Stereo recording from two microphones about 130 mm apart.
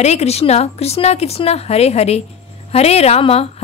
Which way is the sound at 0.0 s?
55° left (ahead or behind).